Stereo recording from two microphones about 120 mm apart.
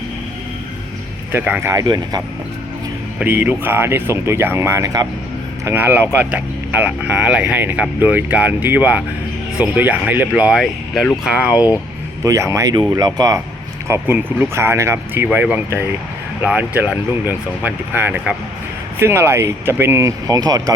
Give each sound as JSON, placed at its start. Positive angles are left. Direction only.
{"t": 1.3, "sound": "speech", "side_deg": -15}
{"t": 1.7, "sound": "speech", "side_deg": -30}
{"t": 3.2, "sound": "speech", "side_deg": -15}
{"t": 5.6, "sound": "speech", "side_deg": -20}
{"t": 10.5, "sound": "speech", "side_deg": 0}
{"t": 11.5, "sound": "speech", "side_deg": 30}
{"t": 12.2, "sound": "speech", "side_deg": -25}